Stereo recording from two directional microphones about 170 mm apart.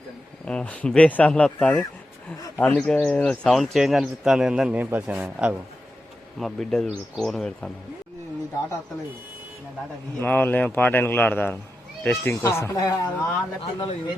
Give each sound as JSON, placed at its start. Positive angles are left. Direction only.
{"t": 0.4, "sound": "a man's voice", "side_deg": 5}
{"t": 6.4, "sound": "speech", "side_deg": 0}
{"t": 10.2, "sound": "a man's voice", "side_deg": 10}
{"t": 13.6, "sound": "speech", "side_deg": 30}